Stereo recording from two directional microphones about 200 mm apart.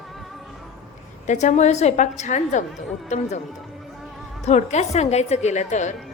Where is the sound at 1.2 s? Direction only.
35° left (ahead or behind).